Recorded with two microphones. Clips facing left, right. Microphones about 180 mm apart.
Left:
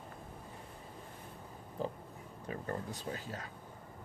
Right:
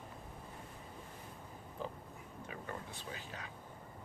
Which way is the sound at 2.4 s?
40° left (ahead or behind).